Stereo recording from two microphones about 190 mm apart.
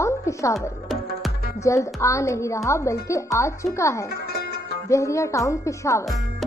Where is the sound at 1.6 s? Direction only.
15° left (ahead or behind).